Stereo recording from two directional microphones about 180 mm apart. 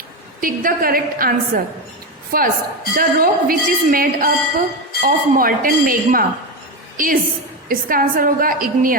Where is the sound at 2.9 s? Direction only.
55° right (ahead or behind).